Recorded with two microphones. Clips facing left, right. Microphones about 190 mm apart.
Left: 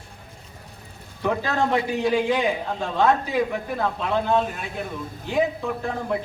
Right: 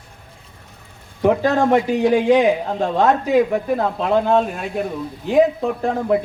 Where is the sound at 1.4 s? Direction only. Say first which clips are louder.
Right 7 dB; 45° right (ahead or behind).